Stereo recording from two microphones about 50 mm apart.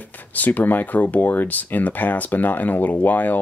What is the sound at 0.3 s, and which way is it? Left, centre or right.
Speech, left.